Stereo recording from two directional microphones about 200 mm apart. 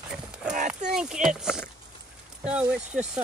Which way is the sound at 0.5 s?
35° right (ahead or behind).